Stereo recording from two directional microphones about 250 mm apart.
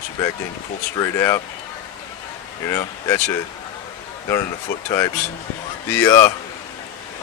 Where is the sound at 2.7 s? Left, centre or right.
Centre.